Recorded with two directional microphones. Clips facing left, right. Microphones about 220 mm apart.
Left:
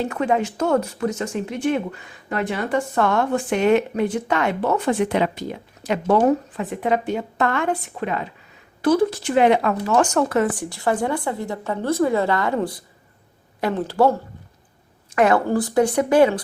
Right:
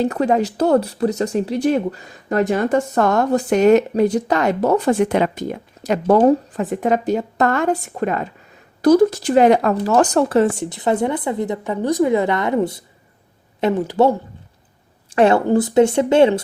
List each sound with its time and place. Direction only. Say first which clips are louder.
0.0 s speech: right 4 dB; 40° right (ahead or behind); by 14.2 s 20° right (ahead or behind)
15.1 s speech: right 4 dB; 30° right (ahead or behind)